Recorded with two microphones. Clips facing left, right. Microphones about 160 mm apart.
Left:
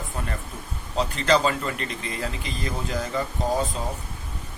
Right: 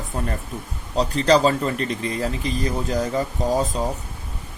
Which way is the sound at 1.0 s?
35° right (ahead or behind).